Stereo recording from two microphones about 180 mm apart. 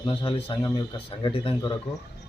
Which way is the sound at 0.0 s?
30° left (ahead or behind).